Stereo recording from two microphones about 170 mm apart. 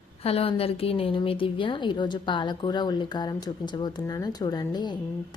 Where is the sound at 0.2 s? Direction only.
35° left (ahead or behind).